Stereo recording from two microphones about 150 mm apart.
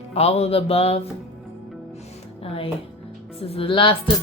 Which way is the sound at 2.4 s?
40° left (ahead or behind).